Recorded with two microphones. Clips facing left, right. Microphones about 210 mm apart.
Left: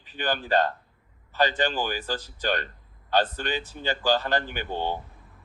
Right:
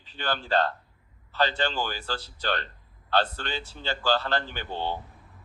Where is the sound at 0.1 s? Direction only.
15° left (ahead or behind).